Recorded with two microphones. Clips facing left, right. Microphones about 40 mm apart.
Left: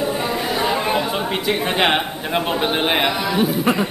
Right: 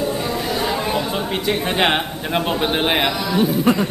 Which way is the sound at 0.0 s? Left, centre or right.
Centre.